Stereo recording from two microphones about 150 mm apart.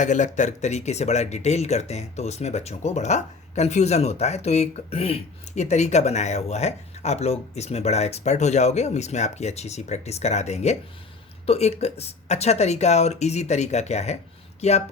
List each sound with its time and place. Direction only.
0.0 s a woman's voice: 55° left (ahead or behind)